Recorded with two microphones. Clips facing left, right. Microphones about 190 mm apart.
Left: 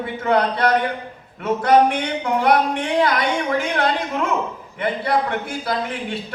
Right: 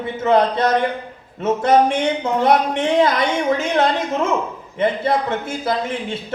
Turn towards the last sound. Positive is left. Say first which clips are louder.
# right 2 dB
turn(degrees=-25)  # may be behind; listen again after turning